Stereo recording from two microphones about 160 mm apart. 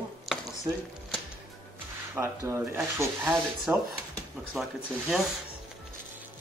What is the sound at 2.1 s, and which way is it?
Speech, 15° right (ahead or behind).